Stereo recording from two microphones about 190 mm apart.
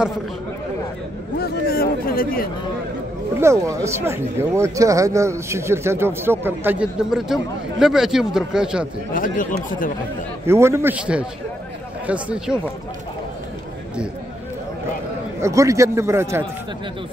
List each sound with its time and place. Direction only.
1.4 s a sound: 50° left (ahead or behind)
3.3 s speech: 15° right (ahead or behind)
9.1 s speech: 45° left (ahead or behind)
10.4 s speech: 15° right (ahead or behind)
15.4 s speech: 15° right (ahead or behind)